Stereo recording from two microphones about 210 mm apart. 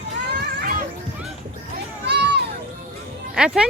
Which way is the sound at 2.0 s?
50° right (ahead or behind).